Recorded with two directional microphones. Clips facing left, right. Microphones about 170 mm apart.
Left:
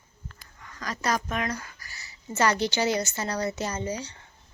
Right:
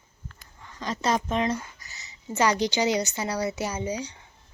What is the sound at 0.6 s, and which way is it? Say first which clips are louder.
Speech: right 3 dB; 25° right (ahead or behind).